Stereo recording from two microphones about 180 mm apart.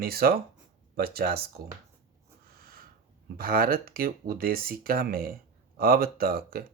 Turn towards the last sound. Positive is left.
turn(degrees=-55)  # may be behind; listen again after turning